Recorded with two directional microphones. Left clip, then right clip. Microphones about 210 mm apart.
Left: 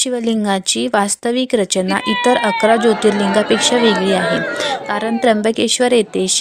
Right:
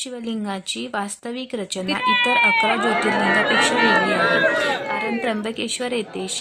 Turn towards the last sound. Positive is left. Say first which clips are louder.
# left 11 dB
turn(degrees=35)  # may be behind; listen again after turning